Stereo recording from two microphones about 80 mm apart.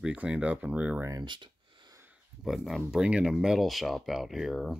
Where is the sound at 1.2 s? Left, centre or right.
Right.